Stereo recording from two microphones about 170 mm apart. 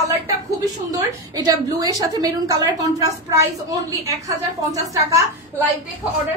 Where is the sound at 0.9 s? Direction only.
20° right (ahead or behind).